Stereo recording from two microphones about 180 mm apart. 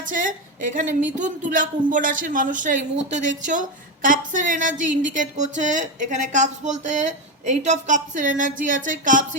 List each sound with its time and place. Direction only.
0.1 s speech: 50° right (ahead or behind)